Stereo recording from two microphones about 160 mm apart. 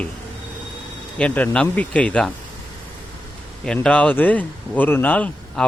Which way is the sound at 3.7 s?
10° left (ahead or behind).